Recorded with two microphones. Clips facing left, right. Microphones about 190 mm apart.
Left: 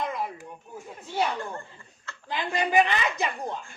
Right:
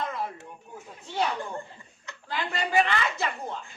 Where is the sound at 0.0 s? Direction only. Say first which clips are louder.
Left 1 dB; 15° left (ahead or behind).